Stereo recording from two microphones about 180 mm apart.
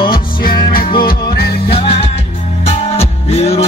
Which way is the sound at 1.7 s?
30° left (ahead or behind).